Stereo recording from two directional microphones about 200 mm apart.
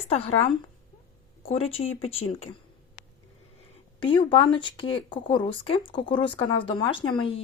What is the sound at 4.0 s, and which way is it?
Speech, 25° left (ahead or behind).